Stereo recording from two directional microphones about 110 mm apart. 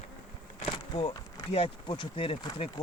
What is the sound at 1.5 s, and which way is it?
Speech, 55° left (ahead or behind).